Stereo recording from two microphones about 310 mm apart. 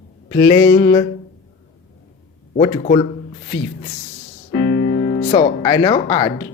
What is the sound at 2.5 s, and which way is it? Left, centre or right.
Speech, centre.